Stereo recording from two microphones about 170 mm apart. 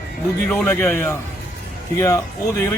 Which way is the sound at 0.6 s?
5° left (ahead or behind).